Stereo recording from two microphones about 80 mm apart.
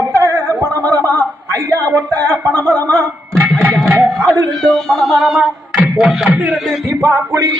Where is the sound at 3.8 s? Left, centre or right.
Right.